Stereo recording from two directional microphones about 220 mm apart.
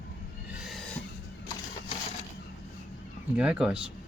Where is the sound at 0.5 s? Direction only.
Centre (ahead or behind).